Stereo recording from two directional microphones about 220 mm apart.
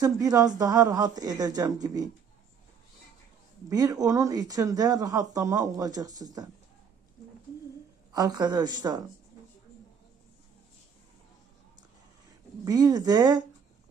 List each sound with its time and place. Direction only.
0.0 s speech: 15° right (ahead or behind)
3.7 s speech: 15° right (ahead or behind)
8.1 s speech: 20° right (ahead or behind)
12.6 s speech: 15° right (ahead or behind)